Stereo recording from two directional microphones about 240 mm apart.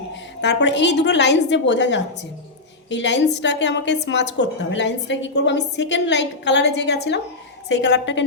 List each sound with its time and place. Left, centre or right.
0.1 s a woman's voice: left